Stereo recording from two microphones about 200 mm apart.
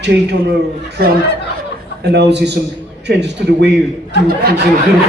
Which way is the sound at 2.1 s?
60° right (ahead or behind).